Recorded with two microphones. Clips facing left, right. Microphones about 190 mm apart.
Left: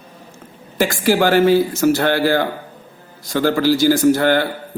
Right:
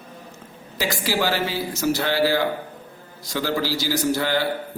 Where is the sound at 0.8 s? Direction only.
50° left (ahead or behind).